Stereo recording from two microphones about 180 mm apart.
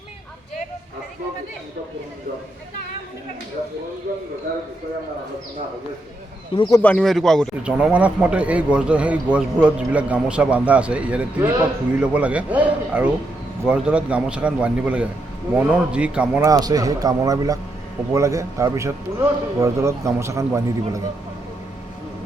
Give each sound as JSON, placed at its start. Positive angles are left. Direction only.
{"t": 6.6, "sound": "speech", "side_deg": 20}
{"t": 6.8, "sound": "speech", "side_deg": 5}
{"t": 16.5, "sound": "a man's voice", "side_deg": -20}